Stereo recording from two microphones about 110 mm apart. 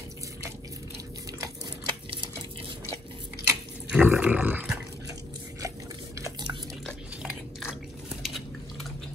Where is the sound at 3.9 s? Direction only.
15° right (ahead or behind).